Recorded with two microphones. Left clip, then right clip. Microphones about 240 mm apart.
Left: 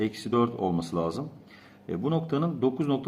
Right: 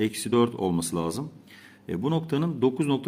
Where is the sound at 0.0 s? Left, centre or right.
Right.